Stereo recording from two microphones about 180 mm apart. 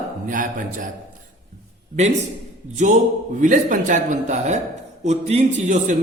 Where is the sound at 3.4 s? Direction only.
45° right (ahead or behind).